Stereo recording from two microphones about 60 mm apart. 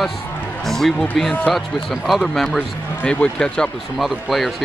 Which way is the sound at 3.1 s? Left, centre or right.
Centre.